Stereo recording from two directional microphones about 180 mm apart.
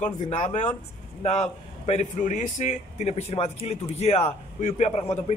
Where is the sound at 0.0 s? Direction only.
40° left (ahead or behind).